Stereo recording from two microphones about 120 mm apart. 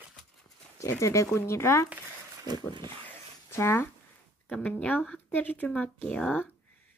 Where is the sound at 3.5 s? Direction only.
20° left (ahead or behind).